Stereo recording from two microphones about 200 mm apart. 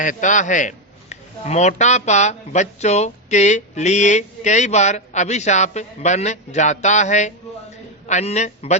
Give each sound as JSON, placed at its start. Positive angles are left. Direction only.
{"t": 0.0, "sound": "a man's voice", "side_deg": 40}